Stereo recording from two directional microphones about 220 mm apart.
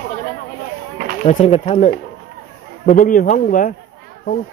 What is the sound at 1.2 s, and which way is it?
Speech, 30° left (ahead or behind).